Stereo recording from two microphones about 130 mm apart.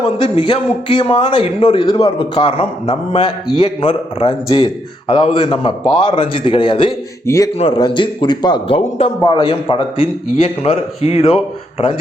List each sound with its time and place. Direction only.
0.2 s a man's voice: 40° left (ahead or behind)
7.3 s speech: 25° left (ahead or behind)
7.6 s a man's voice: 40° left (ahead or behind)